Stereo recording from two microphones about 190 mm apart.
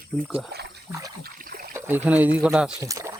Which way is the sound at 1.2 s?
50° right (ahead or behind).